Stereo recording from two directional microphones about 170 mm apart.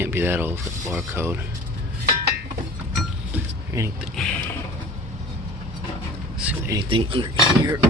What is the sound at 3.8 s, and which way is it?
Speech, 15° right (ahead or behind).